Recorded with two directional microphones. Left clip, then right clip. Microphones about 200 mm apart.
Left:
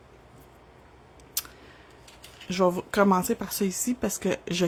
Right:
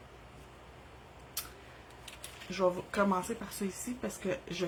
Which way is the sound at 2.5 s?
55° left (ahead or behind).